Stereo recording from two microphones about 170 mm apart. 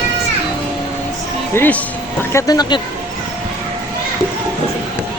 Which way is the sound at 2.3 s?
20° left (ahead or behind).